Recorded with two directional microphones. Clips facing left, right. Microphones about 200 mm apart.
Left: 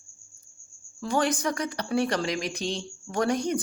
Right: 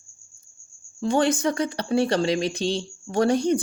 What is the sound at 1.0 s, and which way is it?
Speech, 25° right (ahead or behind).